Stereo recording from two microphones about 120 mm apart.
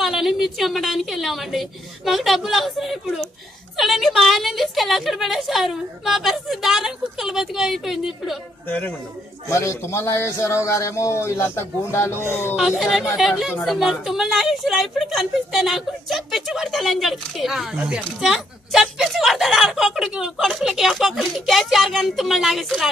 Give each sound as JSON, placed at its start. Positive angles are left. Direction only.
{"t": 0.0, "sound": "speech", "side_deg": 0}
{"t": 8.6, "sound": "a man's voice", "side_deg": 15}
{"t": 9.5, "sound": "a man's voice", "side_deg": 25}
{"t": 12.5, "sound": "speech", "side_deg": -5}